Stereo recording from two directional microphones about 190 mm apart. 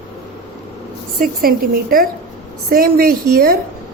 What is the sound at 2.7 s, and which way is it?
Speech, 50° right (ahead or behind).